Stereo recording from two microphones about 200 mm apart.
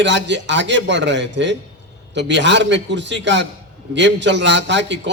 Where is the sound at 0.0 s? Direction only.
65° right (ahead or behind).